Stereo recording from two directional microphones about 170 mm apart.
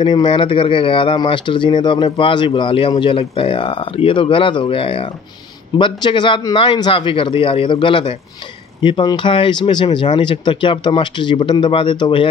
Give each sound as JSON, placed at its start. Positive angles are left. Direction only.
{"t": 0.0, "sound": "speech", "side_deg": 30}